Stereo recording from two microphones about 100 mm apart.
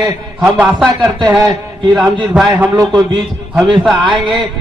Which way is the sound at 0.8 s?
Centre (ahead or behind).